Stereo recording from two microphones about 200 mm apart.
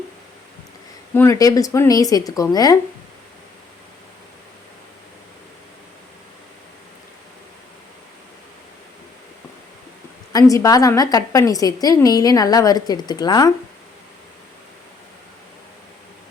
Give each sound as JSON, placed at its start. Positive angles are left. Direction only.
{"t": 1.1, "sound": "speech", "side_deg": 15}
{"t": 10.3, "sound": "a woman's voice", "side_deg": 15}